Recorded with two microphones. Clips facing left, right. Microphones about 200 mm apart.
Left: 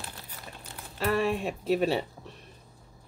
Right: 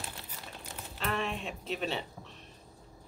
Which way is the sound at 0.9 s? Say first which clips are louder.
Left 8 dB; 45° left (ahead or behind).